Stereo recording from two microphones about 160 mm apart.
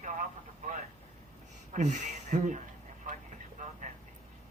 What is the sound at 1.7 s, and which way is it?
Speech, 50° right (ahead or behind).